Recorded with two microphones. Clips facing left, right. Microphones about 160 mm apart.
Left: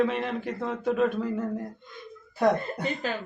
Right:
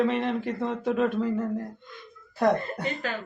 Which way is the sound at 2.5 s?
20° left (ahead or behind).